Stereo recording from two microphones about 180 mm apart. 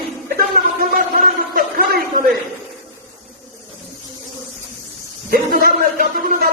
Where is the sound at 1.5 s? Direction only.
55° right (ahead or behind).